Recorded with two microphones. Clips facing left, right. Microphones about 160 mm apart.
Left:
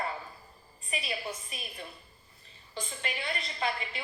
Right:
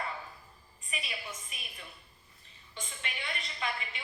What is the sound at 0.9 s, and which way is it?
A woman's voice, 35° left (ahead or behind).